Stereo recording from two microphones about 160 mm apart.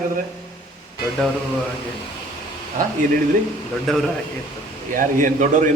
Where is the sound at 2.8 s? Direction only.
60° right (ahead or behind).